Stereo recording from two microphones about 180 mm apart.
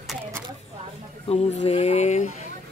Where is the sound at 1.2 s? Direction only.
35° left (ahead or behind).